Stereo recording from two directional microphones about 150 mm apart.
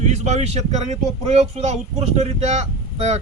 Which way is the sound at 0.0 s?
50° right (ahead or behind).